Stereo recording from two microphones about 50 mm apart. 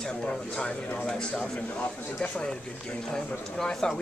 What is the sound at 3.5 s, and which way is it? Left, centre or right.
Speech, centre.